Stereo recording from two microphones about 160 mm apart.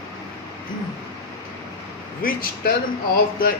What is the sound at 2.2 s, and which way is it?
Speech, 65° left (ahead or behind).